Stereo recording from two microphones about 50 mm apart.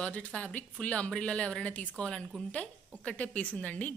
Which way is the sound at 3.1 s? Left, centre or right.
Left.